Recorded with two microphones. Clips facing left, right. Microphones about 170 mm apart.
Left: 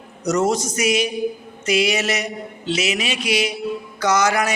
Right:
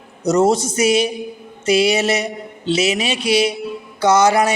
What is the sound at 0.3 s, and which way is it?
A man's voice, 30° right (ahead or behind).